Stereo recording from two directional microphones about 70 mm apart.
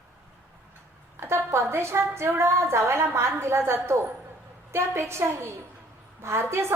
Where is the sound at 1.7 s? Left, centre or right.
Right.